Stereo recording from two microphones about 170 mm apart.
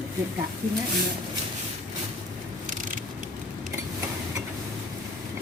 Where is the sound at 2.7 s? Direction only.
50° right (ahead or behind).